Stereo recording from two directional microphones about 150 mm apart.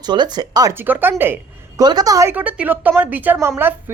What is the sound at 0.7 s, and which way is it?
Speech, 15° right (ahead or behind).